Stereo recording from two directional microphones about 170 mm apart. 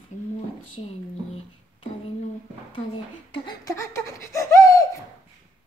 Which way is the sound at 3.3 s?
20° left (ahead or behind).